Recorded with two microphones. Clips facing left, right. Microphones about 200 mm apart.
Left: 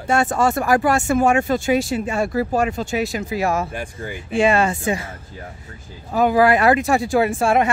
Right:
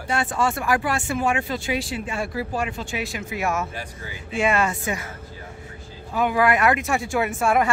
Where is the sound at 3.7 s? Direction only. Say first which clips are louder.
Left 6 dB; 50° left (ahead or behind).